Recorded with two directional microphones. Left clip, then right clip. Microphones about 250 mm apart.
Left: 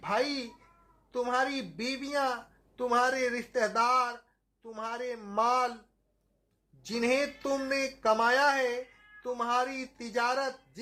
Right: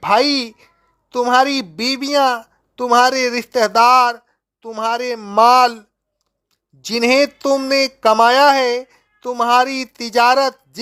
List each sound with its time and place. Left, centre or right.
0.0 s a woman's voice: right
6.8 s a woman's voice: right